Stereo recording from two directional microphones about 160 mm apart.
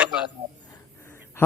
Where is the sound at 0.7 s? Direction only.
15° left (ahead or behind).